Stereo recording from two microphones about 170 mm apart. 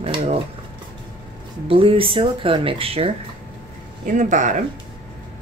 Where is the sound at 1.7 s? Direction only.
30° right (ahead or behind).